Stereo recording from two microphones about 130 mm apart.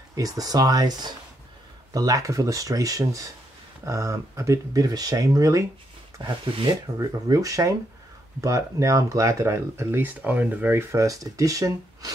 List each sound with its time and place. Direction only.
0.1 s speech: 30° right (ahead or behind)